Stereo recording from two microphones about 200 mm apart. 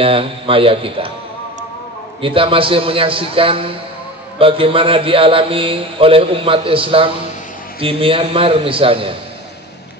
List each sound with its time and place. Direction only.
0.0 s a man's voice: 25° right (ahead or behind)
2.2 s a man's voice: 25° right (ahead or behind)